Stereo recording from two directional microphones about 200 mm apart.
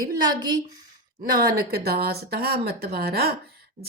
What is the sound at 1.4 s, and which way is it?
A woman's voice, 50° right (ahead or behind).